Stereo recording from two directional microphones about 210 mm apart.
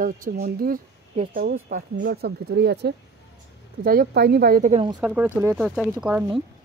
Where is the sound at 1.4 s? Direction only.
45° right (ahead or behind).